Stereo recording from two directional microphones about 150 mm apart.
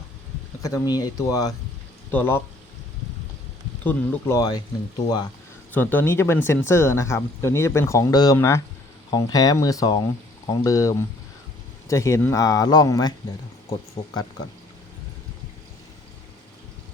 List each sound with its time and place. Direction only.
0.6 s speech: 25° left (ahead or behind)
3.8 s speech: 15° left (ahead or behind)
5.7 s speech: 10° left (ahead or behind)
14.0 s speech: 35° left (ahead or behind)